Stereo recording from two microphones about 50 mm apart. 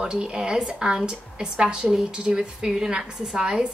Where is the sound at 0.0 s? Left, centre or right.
Centre.